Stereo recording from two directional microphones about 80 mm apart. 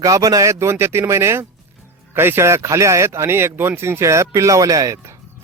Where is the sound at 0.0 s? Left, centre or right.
Right.